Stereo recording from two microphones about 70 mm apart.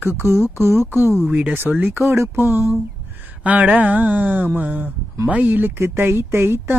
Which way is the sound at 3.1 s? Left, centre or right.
Right.